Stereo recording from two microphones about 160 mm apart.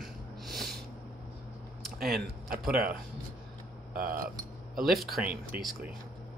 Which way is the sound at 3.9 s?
65° right (ahead or behind).